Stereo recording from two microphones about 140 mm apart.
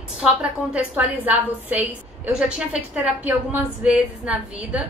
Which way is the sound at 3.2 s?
10° right (ahead or behind).